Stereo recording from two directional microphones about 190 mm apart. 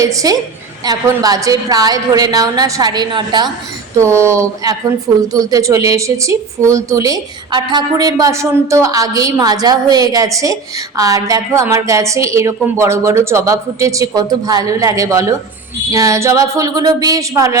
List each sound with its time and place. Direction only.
0.0 s a woman's voice: 15° right (ahead or behind)